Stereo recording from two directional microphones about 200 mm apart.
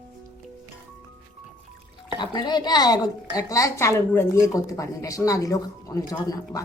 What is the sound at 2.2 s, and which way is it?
A woman's voice, 20° left (ahead or behind).